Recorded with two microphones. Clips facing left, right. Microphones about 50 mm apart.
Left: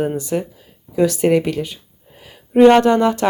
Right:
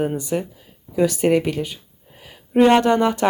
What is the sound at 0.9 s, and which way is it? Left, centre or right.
Speech, centre.